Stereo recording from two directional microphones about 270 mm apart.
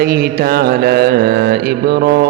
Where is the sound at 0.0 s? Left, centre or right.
Right.